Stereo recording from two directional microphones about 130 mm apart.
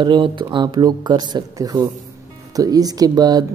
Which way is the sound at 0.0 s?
40° right (ahead or behind).